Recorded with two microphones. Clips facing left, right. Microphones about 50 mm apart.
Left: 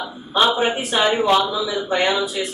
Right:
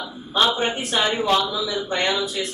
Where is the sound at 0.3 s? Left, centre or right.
Centre.